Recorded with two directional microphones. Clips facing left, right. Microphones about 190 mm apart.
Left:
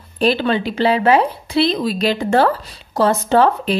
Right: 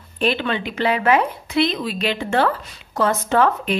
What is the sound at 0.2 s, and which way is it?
A woman's voice, 35° left (ahead or behind).